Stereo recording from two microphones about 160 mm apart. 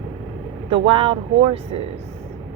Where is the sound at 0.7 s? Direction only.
35° right (ahead or behind).